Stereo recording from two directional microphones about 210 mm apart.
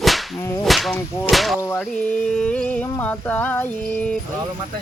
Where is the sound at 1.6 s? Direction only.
5° left (ahead or behind).